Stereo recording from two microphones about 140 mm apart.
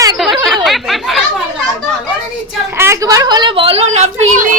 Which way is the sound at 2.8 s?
20° right (ahead or behind).